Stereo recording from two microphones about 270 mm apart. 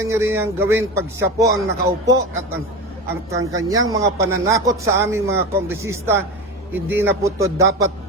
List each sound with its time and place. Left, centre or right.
0.0 s a man's voice: centre